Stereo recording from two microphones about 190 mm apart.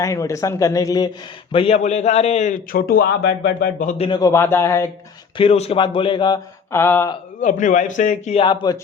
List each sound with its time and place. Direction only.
0.0 s speech: 15° left (ahead or behind)
1.5 s a man's voice: 30° left (ahead or behind); by 3.8 s 55° left (ahead or behind)
3.8 s speech: 30° left (ahead or behind); by 4.9 s 15° left (ahead or behind)
5.4 s a man's voice: 30° left (ahead or behind); by 7.1 s 10° left (ahead or behind)
7.4 s a man's voice: 40° left (ahead or behind)
8.4 s a man's voice: 20° left (ahead or behind)